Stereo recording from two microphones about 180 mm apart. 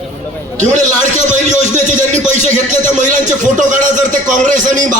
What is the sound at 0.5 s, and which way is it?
A man's voice, 45° right (ahead or behind).